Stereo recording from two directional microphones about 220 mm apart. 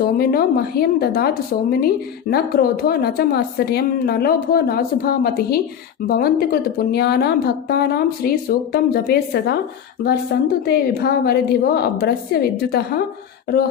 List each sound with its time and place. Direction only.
0.1 s a woman's voice: 45° left (ahead or behind)